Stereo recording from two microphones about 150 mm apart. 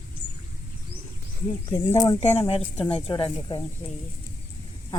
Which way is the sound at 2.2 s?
45° left (ahead or behind).